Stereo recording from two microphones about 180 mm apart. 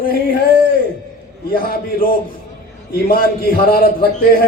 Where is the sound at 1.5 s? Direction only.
55° left (ahead or behind).